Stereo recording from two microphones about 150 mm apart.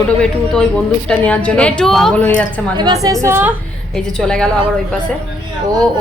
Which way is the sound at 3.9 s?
5° left (ahead or behind).